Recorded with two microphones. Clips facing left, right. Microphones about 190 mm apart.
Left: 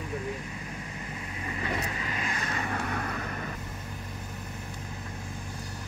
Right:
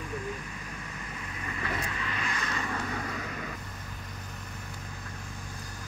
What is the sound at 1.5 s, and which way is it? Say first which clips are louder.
Vehicle: left 2 dB; 25° left (ahead or behind).